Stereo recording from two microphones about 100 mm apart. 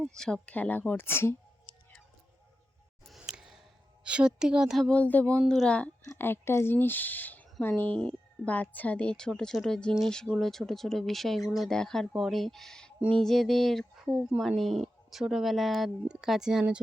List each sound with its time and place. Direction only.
0.4 s speech: 15° left (ahead or behind)
3.1 s a sound: 5° right (ahead or behind)
4.0 s a woman's voice: 10° right (ahead or behind)
4.9 s speech: 15° left (ahead or behind)
6.1 s speech: 20° left (ahead or behind); by 16.8 s 5° right (ahead or behind)